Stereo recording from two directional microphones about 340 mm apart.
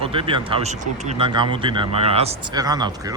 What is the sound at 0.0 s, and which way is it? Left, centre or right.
Speech, centre.